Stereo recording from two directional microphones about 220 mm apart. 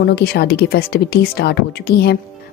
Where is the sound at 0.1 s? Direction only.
45° left (ahead or behind).